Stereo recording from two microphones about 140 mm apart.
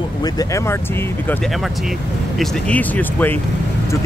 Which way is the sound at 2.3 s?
10° left (ahead or behind).